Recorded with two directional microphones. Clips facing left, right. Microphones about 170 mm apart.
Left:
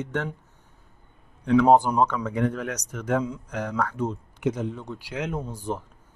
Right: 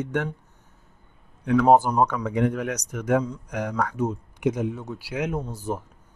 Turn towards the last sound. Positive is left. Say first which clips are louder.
# right 1 dB
turn(degrees=-5)  # may be behind; listen again after turning